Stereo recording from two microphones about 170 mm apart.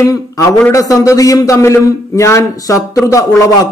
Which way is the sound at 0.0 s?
20° left (ahead or behind).